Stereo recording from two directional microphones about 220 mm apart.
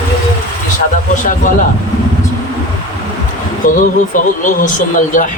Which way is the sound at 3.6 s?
35° left (ahead or behind).